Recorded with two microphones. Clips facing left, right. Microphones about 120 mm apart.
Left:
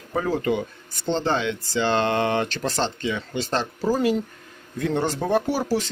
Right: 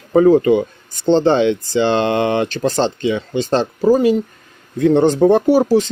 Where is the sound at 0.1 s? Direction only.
45° right (ahead or behind).